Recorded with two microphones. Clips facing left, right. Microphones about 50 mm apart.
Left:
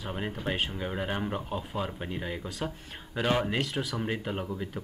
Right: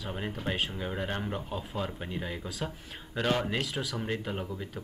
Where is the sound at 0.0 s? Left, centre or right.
Centre.